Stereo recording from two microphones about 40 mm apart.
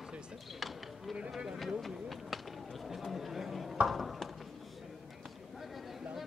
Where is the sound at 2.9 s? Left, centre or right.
Centre.